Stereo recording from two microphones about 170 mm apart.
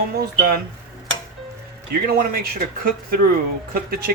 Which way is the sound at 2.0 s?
60° right (ahead or behind).